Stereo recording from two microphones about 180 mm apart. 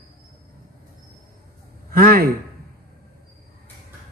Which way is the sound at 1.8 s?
55° right (ahead or behind).